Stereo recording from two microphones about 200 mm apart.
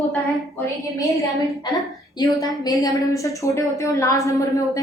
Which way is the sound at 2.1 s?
20° left (ahead or behind).